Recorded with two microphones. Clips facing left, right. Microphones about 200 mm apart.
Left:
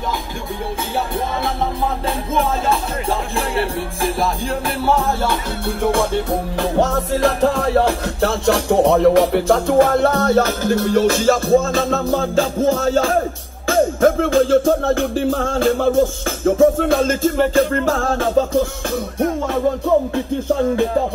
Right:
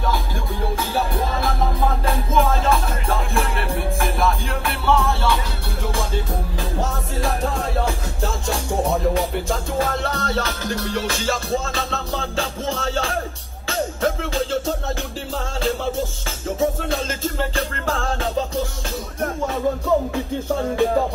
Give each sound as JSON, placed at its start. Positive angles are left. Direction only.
{"t": 2.7, "sound": "music", "side_deg": 30}
{"t": 13.7, "sound": "music", "side_deg": 50}